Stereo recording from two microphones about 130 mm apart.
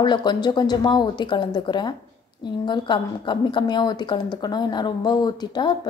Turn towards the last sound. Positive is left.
turn(degrees=35)  # may be behind; listen again after turning